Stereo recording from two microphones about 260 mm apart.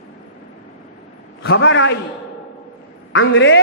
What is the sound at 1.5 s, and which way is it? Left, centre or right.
Speech, left.